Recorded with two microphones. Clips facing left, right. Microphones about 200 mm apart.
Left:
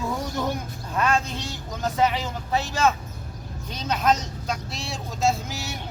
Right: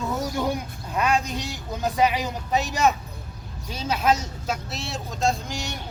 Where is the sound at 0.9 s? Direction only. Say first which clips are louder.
Even; 15° right (ahead or behind).